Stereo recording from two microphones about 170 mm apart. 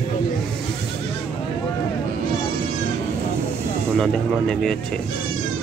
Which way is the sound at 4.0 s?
5° left (ahead or behind).